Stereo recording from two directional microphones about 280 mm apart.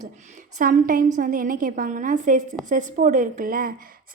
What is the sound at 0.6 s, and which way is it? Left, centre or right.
A woman's voice, right.